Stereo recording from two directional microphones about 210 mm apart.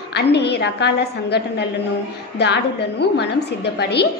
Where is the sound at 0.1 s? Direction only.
55° left (ahead or behind).